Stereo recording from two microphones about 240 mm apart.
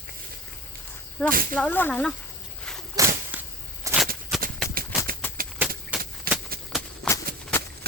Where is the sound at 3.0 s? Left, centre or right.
Centre.